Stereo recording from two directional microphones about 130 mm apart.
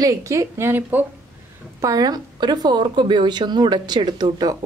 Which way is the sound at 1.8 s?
30° right (ahead or behind).